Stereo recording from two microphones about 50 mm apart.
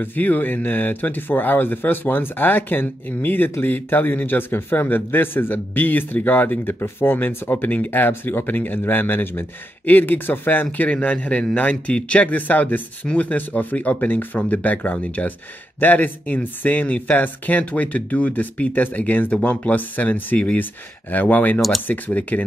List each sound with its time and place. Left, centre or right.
0.0 s a man's voice: left
10.9 s a man's voice: left
21.5 s speech: centre
21.8 s a man's voice: left